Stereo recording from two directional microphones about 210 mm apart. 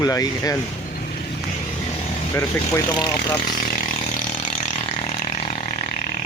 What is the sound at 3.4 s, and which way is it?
Speech, 40° left (ahead or behind).